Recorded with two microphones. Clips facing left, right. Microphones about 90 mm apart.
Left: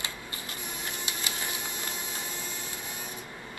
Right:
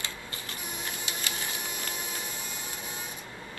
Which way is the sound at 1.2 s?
20° left (ahead or behind).